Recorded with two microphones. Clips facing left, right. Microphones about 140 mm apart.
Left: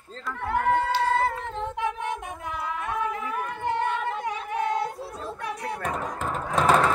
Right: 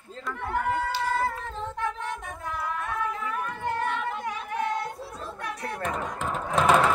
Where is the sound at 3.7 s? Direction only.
25° left (ahead or behind).